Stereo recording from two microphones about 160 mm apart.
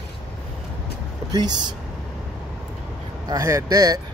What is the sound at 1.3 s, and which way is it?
Speech, 25° right (ahead or behind).